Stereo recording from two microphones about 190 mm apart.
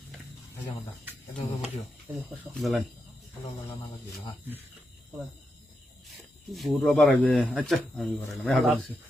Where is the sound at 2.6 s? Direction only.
Centre (ahead or behind).